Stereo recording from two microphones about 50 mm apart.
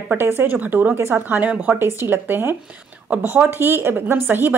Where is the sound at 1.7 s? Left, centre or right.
Right.